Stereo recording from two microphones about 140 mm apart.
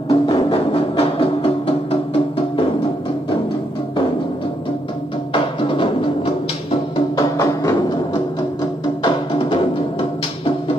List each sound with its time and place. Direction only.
0.1 s music: 45° left (ahead or behind)
5.3 s music: 35° left (ahead or behind)
7.3 s music: 25° left (ahead or behind)
9.0 s music: 40° left (ahead or behind)